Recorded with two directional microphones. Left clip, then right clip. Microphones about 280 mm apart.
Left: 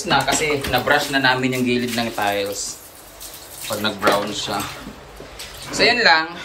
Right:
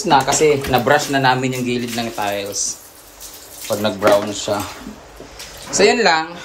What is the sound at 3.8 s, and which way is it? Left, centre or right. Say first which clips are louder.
Speech: right 4 dB; right.